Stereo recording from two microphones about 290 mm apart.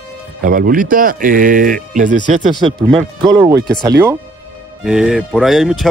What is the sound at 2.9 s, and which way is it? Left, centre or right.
Speech, centre.